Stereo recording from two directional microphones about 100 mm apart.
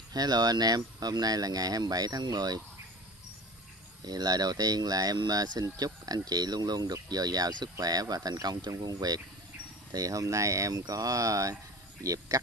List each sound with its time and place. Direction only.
0.1 s speech: 45° right (ahead or behind)
4.0 s speech: 40° right (ahead or behind)